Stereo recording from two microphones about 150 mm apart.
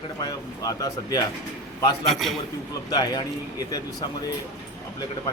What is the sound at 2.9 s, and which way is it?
Speech, 25° left (ahead or behind).